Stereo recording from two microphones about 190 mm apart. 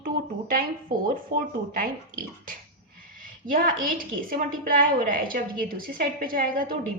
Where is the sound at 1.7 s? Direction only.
50° right (ahead or behind).